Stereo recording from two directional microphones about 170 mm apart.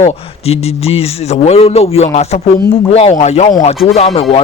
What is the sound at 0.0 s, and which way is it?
A man's voice, 35° left (ahead or behind).